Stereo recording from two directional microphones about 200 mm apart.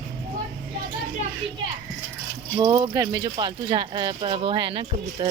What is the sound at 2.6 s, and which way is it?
Speech, 20° right (ahead or behind).